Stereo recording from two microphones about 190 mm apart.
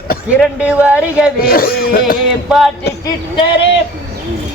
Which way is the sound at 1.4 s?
50° left (ahead or behind).